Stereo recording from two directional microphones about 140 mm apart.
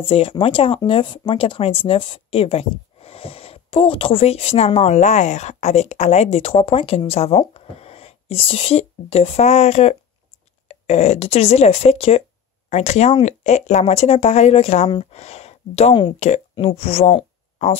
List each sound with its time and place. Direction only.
0.0 s speech: 40° left (ahead or behind)